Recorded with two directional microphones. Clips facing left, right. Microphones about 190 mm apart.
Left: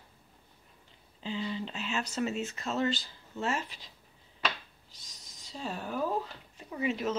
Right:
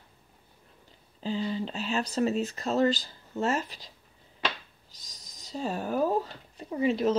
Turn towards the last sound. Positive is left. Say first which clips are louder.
# right 6 dB
turn(degrees=-35)  # may be behind; listen again after turning